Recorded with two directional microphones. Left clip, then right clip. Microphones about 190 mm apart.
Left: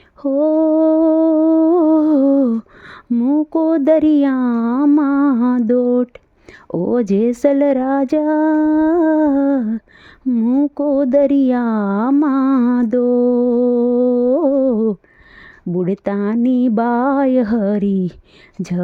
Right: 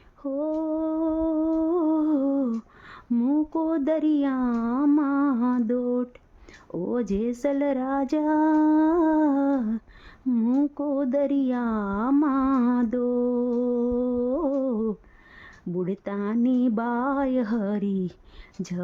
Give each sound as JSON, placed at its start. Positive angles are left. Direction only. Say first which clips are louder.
{"t": 0.2, "sound": "humming", "louder": "left 13 dB", "side_deg": 35}
{"t": 3.1, "sound": "a sound", "louder": "left 8 dB", "side_deg": 20}
{"t": 3.5, "sound": "speech", "louder": "left 11 dB", "side_deg": 30}
{"t": 4.9, "sound": "lullaby", "louder": "left 9 dB", "side_deg": 35}
{"t": 6.7, "sound": "speech", "louder": "left 11 dB", "side_deg": 30}
{"t": 10.8, "sound": "speech", "louder": "left 14 dB", "side_deg": 30}